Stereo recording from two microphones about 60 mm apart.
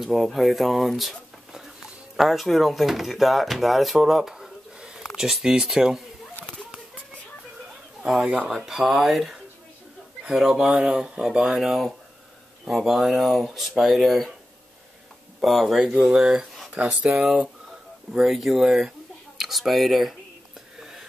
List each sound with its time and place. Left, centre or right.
0.0 s speech: centre
8.1 s speech: centre
15.4 s speech: centre
15.8 s speech: centre
16.8 s speech: right
17.1 s speech: centre